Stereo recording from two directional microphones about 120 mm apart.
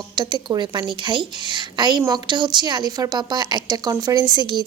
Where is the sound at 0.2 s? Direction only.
40° right (ahead or behind).